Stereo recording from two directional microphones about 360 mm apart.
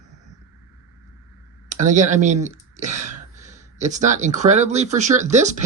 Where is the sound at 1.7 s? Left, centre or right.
Right.